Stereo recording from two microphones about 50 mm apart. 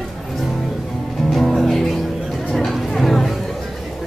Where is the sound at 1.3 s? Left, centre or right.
Centre.